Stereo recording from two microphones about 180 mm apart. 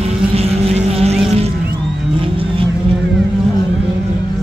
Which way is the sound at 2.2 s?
30° right (ahead or behind).